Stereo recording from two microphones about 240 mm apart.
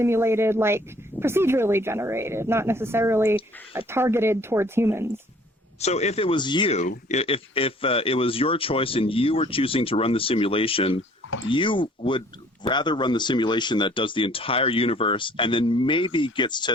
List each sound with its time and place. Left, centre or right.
0.0 s a woman's voice: centre
5.8 s speech: left
11.3 s speech: left
11.5 s speech: left